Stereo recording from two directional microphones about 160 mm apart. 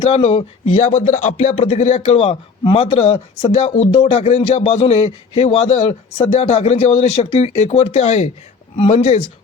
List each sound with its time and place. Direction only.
0.0 s speech: 40° left (ahead or behind)